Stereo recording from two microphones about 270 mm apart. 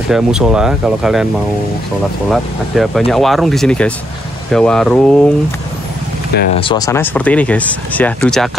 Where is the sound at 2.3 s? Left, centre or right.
Centre.